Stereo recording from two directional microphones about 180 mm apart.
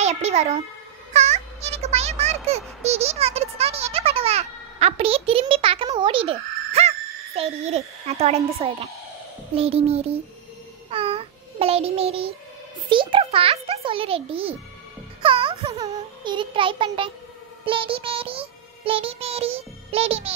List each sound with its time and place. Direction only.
0.0 s a child's voice: 40° right (ahead or behind)
10.9 s child singing: 30° right (ahead or behind)
12.9 s a child's voice: 30° right (ahead or behind)
15.2 s a sound: 30° right (ahead or behind)
17.6 s music: 30° right (ahead or behind)